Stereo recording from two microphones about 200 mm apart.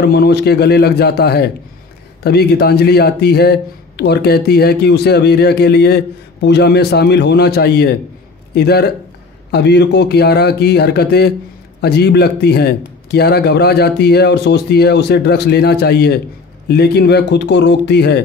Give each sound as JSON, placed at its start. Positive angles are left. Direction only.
{"t": 0.0, "sound": "a man's voice", "side_deg": 55}